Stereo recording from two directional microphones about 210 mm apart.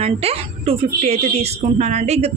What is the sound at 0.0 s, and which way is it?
A woman's voice, 30° right (ahead or behind).